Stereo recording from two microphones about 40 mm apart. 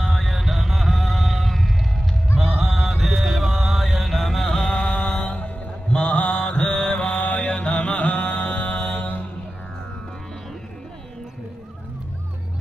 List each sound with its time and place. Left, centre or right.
0.0 s music: centre; by 5.4 s left
5.4 s mantra: left
8.8 s mantra: left